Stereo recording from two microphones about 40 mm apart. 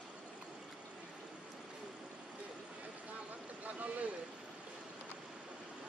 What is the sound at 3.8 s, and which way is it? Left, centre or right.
Boat, right.